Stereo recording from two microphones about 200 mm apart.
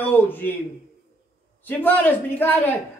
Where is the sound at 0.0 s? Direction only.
10° left (ahead or behind).